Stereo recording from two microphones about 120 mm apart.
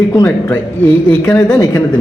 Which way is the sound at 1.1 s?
25° left (ahead or behind).